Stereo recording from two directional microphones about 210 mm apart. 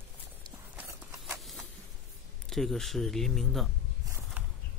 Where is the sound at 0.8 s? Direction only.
10° right (ahead or behind).